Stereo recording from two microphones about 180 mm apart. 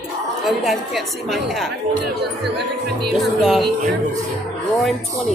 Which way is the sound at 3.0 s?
Centre (ahead or behind).